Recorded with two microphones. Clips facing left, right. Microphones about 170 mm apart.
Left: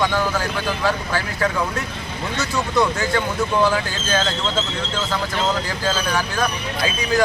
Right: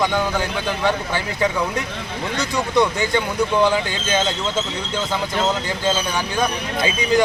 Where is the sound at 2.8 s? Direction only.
20° right (ahead or behind).